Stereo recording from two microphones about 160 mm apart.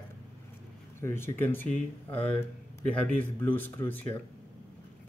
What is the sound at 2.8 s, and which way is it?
Speech, 10° left (ahead or behind).